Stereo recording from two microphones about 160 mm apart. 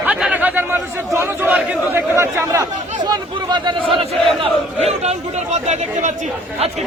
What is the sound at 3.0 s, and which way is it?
Chatter, 30° right (ahead or behind).